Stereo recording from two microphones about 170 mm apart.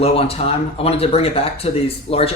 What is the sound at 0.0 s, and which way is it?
Speech, 35° left (ahead or behind).